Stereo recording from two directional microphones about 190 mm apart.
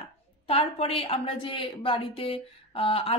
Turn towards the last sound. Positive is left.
turn(degrees=30)  # may be behind; listen again after turning